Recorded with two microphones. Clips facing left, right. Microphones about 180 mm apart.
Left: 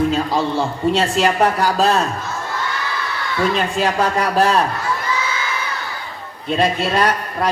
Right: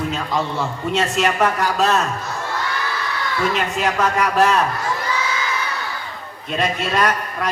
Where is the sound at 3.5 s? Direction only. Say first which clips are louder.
Left 2 dB; 30° left (ahead or behind).